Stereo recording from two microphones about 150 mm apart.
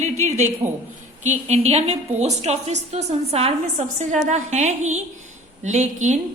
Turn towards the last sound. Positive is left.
turn(degrees=-55)  # may be behind; listen again after turning